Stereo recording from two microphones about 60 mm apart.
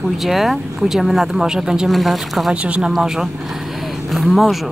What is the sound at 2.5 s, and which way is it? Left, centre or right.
Speech, centre.